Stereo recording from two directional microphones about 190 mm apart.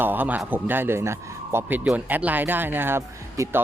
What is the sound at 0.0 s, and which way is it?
A man's voice, 10° right (ahead or behind).